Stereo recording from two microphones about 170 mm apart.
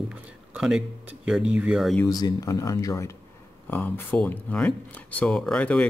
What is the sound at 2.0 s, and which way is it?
Speech, 20° left (ahead or behind).